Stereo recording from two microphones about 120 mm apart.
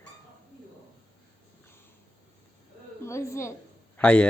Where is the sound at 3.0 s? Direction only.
20° left (ahead or behind).